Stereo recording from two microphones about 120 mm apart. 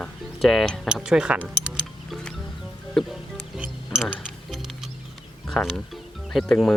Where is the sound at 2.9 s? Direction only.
Centre (ahead or behind).